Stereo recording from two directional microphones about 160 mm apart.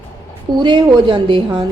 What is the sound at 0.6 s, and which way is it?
A woman's voice, 30° right (ahead or behind).